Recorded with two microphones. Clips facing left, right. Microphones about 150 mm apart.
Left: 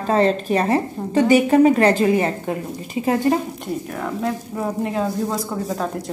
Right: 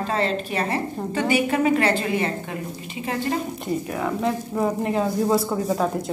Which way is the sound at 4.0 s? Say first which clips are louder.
Left 1 dB; centre (ahead or behind).